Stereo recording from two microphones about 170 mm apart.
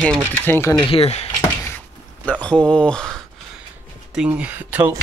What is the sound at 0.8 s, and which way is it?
Speech, 35° left (ahead or behind).